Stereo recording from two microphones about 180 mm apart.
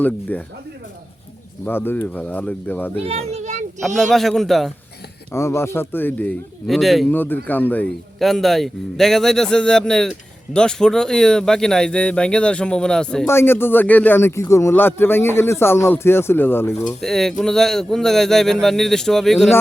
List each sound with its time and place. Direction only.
0.0 s a man's voice: 10° left (ahead or behind)
1.6 s a man's voice: 10° left (ahead or behind)
2.9 s a child's voice: 35° right (ahead or behind)
3.8 s a man's voice: centre (ahead or behind)
5.3 s a man's voice: 15° left (ahead or behind); by 7.1 s centre (ahead or behind)
7.1 s a man's voice: 10° left (ahead or behind)
17.0 s a man's voice: centre (ahead or behind)